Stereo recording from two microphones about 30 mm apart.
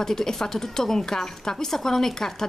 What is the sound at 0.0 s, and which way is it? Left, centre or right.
A woman's voice, centre.